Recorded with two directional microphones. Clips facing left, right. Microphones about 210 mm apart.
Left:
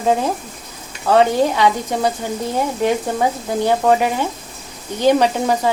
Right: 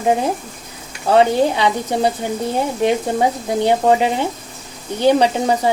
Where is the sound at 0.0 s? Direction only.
15° right (ahead or behind).